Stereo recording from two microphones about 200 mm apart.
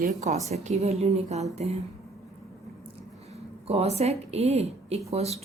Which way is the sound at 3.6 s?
30° right (ahead or behind).